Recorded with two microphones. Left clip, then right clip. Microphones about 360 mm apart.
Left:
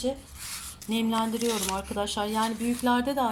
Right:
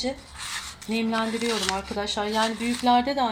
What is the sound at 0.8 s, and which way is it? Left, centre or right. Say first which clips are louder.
Speech: right 1 dB; centre.